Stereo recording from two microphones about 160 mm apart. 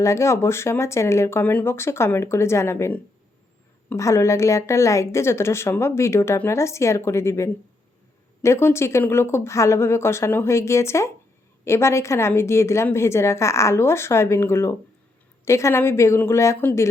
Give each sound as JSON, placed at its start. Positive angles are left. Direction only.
{"t": 0.0, "sound": "a woman's voice", "side_deg": 20}